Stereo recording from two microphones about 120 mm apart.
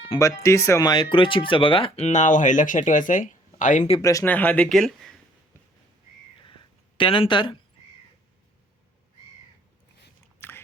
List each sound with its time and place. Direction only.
0.2 s speech: 25° left (ahead or behind); by 2.0 s 45° left (ahead or behind)
2.0 s speech: 85° left
4.0 s speech: 25° left (ahead or behind)
4.3 s speech: 15° left (ahead or behind)
6.4 s a sound: 45° left (ahead or behind)
10.4 s biting: 20° left (ahead or behind)